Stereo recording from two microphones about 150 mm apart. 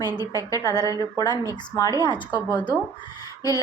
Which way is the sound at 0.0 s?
25° left (ahead or behind).